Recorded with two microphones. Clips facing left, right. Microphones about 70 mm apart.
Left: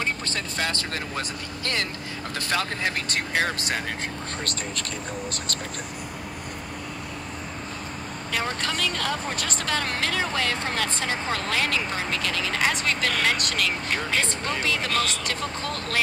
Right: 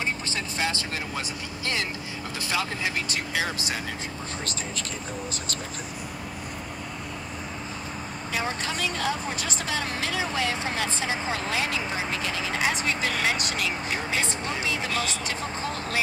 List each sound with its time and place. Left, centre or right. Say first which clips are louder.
0.0 s speech: left 1 dB; left
8.3 s speech: left 1 dB; left